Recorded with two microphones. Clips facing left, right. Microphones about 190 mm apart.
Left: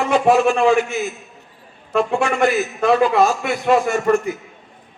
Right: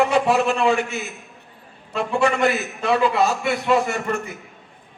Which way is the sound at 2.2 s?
60° right (ahead or behind).